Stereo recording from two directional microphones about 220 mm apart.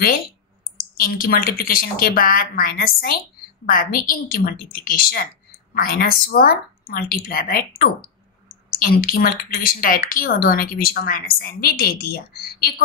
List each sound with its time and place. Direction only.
0.9 s speech: 40° left (ahead or behind)